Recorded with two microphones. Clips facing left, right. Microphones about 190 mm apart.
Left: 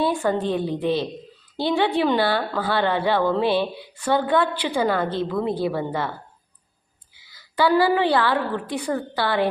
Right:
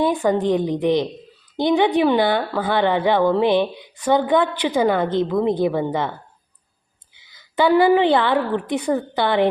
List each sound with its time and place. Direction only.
0.0 s a woman's voice: 15° right (ahead or behind)
7.2 s a woman's voice: 20° right (ahead or behind)